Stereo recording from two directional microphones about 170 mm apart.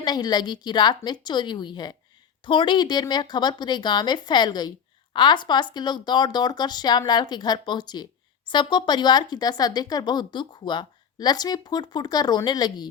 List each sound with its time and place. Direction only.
0.0 s speech: 25° left (ahead or behind)